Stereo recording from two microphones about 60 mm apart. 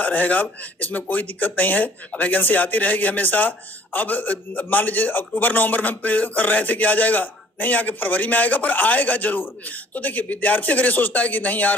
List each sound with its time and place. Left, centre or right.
0.0 s a man's voice: left